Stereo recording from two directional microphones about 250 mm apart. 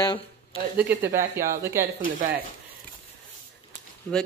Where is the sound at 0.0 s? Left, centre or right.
Centre.